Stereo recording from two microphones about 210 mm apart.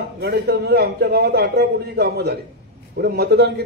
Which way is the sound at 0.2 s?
50° right (ahead or behind).